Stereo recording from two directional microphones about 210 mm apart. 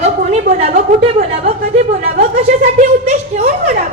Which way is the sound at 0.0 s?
30° right (ahead or behind).